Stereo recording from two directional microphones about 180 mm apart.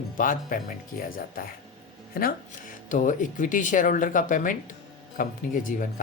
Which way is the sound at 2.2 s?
55° left (ahead or behind).